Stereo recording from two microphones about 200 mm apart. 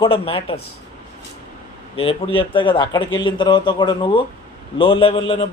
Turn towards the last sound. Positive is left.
turn(degrees=25)  # may be behind; listen again after turning